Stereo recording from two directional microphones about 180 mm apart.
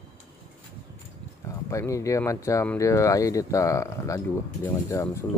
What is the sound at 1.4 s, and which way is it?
Speech, 15° left (ahead or behind).